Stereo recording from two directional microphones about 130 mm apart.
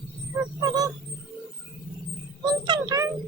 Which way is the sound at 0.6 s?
30° right (ahead or behind).